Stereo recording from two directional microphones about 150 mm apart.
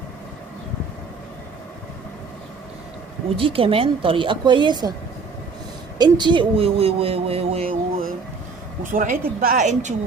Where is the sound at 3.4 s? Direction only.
35° right (ahead or behind).